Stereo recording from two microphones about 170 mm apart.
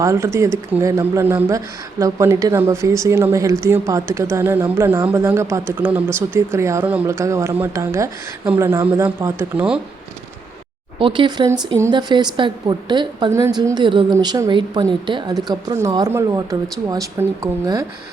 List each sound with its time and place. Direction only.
0.0 s speech: 15° right (ahead or behind)
11.0 s a woman's voice: 30° right (ahead or behind)